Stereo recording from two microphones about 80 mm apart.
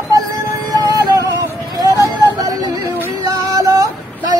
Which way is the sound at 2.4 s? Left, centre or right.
Right.